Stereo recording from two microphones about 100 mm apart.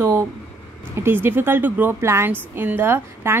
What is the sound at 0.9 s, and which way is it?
A woman's voice, 25° right (ahead or behind).